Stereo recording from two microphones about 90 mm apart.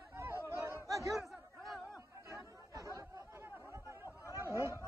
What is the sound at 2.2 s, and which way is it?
Chatter, 35° right (ahead or behind).